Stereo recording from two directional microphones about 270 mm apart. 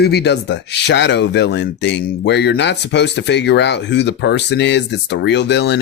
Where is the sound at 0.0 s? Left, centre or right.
Left.